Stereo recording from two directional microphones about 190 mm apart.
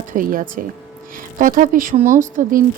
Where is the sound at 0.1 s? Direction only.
45° right (ahead or behind).